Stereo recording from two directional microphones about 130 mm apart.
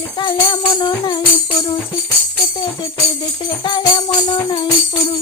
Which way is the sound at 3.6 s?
35° left (ahead or behind).